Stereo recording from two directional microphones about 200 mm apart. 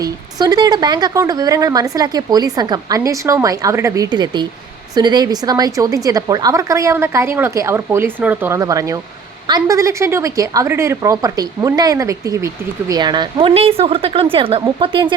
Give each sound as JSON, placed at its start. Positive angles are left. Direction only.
{"t": 0.0, "sound": "a woman's voice", "side_deg": -20}